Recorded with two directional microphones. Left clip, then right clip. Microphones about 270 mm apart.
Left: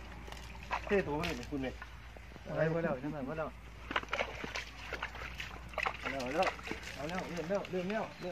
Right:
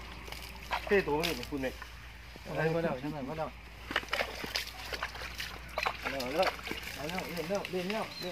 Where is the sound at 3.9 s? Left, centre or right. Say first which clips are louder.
Right 3 dB; right.